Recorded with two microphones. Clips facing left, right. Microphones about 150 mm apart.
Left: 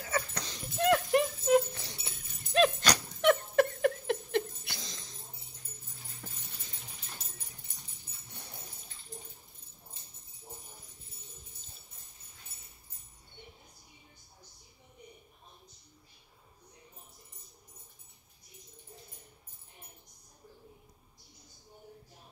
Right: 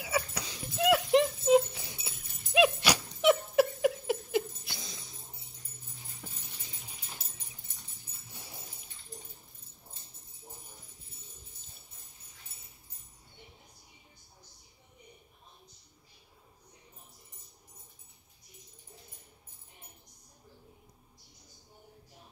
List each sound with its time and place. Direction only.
0.0 s a sound: 10° right (ahead or behind)
1.1 s rattle: 20° right (ahead or behind)
1.7 s dog: 5° right (ahead or behind)
8.3 s dog: 5° right (ahead or behind)